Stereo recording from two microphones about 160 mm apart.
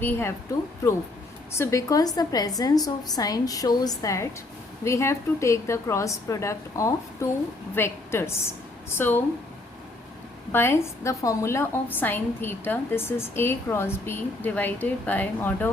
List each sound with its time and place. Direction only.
0.0 s a woman's voice: 15° left (ahead or behind)
1.5 s a woman's voice: 20° left (ahead or behind)
10.5 s a woman's voice: 15° left (ahead or behind)